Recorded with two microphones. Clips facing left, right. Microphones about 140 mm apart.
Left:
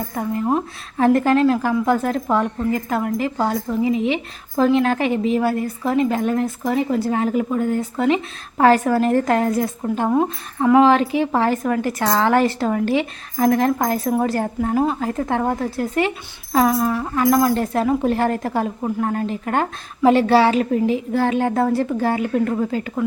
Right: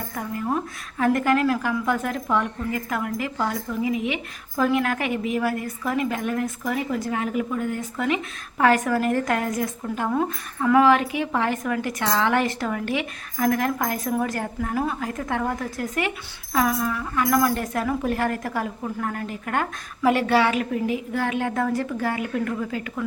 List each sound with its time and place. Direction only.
0.1 s a woman's voice: 30° left (ahead or behind)